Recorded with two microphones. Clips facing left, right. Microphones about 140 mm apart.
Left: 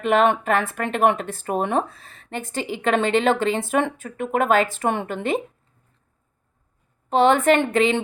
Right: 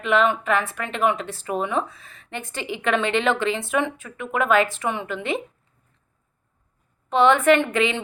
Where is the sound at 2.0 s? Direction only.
35° left (ahead or behind).